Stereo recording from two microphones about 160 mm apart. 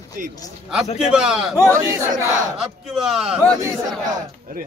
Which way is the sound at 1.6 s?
20° right (ahead or behind).